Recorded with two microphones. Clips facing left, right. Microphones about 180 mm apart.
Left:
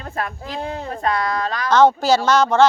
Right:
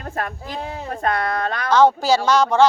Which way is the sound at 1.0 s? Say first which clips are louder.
Even; 55° right (ahead or behind).